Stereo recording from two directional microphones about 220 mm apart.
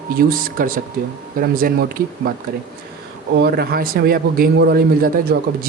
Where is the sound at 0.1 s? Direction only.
40° right (ahead or behind).